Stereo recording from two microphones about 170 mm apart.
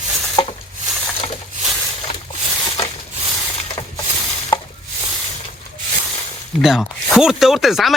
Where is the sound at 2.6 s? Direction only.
35° left (ahead or behind).